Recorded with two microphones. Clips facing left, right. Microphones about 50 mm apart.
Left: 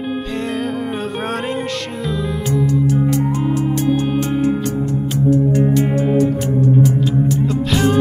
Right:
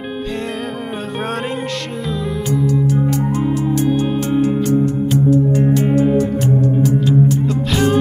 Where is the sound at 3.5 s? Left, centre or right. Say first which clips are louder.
Right 1 dB; left.